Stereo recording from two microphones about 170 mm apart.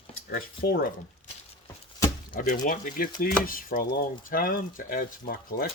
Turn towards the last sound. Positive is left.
turn(degrees=60)  # may be behind; listen again after turning